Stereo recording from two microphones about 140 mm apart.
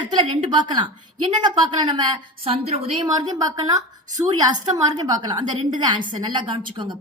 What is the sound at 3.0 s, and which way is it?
A woman's voice, 30° right (ahead or behind).